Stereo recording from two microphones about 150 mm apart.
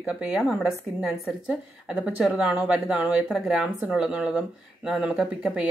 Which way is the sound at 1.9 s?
5° right (ahead or behind).